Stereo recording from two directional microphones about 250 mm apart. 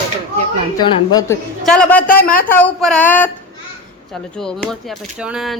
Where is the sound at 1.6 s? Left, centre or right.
Centre.